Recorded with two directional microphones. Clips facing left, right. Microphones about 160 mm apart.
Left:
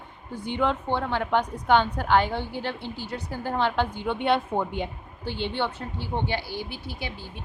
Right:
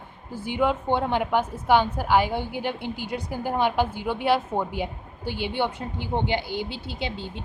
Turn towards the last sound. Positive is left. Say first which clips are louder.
# right 4 dB
turn(degrees=-25)  # may be behind; listen again after turning